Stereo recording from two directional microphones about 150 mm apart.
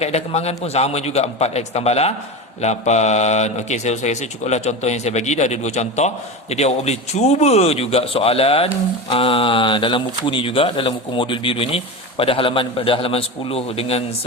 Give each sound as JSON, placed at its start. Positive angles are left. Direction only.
{"t": 0.0, "sound": "speech", "side_deg": 45}